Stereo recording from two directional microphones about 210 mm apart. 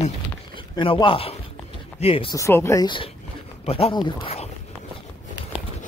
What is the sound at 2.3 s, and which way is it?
Speech, 15° left (ahead or behind).